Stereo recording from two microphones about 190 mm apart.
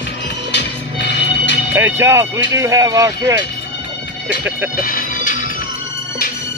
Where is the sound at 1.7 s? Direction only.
15° right (ahead or behind).